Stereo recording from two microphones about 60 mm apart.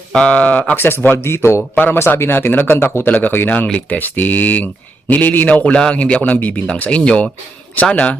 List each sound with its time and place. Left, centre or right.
0.1 s speech: left
0.8 s speech: left
1.7 s speech: left
2.0 s speech: left
3.1 s speech: left